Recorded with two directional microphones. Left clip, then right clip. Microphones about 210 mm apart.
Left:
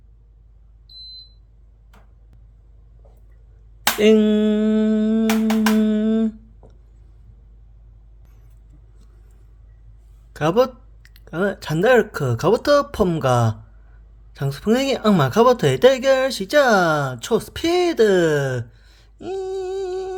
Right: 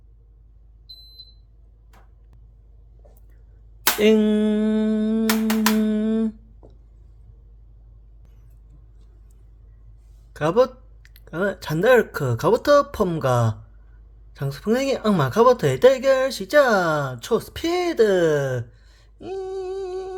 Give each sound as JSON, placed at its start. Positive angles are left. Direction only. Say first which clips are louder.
{"t": 4.0, "sound": "a sound", "louder": "left 3 dB", "side_deg": 5}
{"t": 5.2, "sound": "humming", "louder": "left 2 dB", "side_deg": -25}
{"t": 5.8, "sound": "humming", "louder": "left 3 dB", "side_deg": 5}
{"t": 10.3, "sound": "speech", "louder": "left 1 dB", "side_deg": 10}